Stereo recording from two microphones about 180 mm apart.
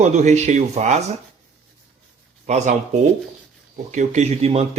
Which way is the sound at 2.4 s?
40° right (ahead or behind).